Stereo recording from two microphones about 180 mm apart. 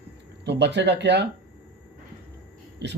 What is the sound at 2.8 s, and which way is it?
Speech, 70° right (ahead or behind).